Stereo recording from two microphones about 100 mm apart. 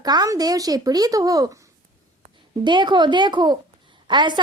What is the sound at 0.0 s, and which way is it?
A child's voice, 40° right (ahead or behind).